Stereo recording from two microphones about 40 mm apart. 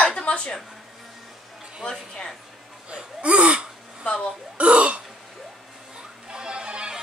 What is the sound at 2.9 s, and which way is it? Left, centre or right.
Gasp, right.